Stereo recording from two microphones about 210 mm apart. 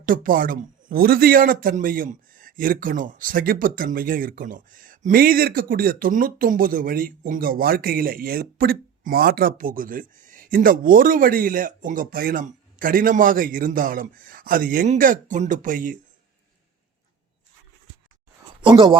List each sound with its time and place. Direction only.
0.0 s speech: 40° right (ahead or behind)
18.6 s speech: 25° right (ahead or behind)